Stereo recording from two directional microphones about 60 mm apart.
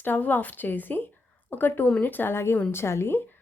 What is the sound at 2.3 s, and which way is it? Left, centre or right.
A woman's voice, left.